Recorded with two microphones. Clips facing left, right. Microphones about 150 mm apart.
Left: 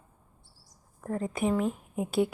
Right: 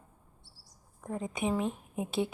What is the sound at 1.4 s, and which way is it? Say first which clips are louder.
Speech: left 3 dB; 20° right (ahead or behind).